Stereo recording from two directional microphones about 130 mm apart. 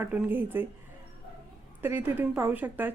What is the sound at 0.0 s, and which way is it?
Speech, 15° right (ahead or behind).